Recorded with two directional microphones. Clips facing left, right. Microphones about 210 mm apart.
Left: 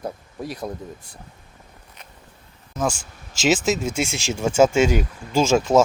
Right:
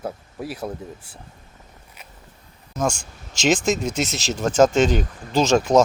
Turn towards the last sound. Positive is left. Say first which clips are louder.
# even
turn(degrees=5)  # may be behind; listen again after turning